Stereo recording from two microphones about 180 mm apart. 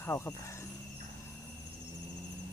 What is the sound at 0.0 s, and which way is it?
Speech, 15° left (ahead or behind).